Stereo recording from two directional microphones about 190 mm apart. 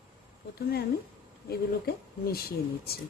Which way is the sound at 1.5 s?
55° left (ahead or behind).